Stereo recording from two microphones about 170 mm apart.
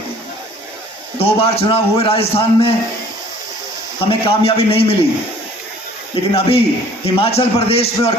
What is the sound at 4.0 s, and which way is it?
Speech, 35° left (ahead or behind).